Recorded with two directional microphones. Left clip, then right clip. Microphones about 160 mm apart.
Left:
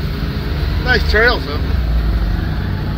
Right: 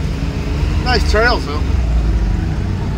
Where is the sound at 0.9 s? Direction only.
35° right (ahead or behind).